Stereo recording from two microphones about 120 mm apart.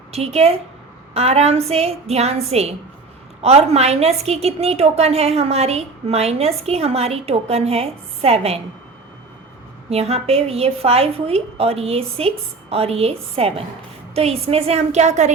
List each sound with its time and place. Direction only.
0.1 s a woman's voice: 60° right (ahead or behind)
9.9 s a woman's voice: 60° right (ahead or behind)